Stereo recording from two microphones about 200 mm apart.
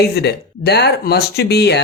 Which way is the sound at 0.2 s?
55° left (ahead or behind).